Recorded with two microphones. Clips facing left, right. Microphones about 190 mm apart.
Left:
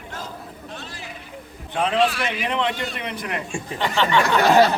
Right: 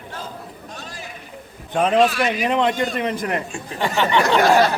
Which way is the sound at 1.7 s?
45° right (ahead or behind).